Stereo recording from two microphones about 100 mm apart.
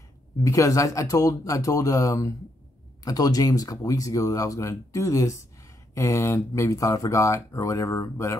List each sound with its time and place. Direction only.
0.4 s speech: 35° left (ahead or behind)